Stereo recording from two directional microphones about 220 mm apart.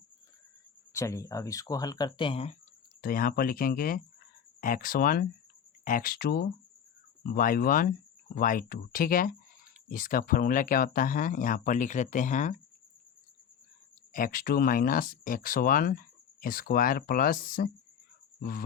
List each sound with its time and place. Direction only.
0.9 s speech: 15° left (ahead or behind)
3.0 s speech: 40° left (ahead or behind)
14.1 s speech: 40° left (ahead or behind)